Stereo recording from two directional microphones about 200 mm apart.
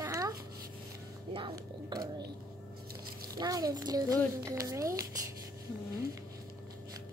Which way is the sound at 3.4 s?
20° right (ahead or behind).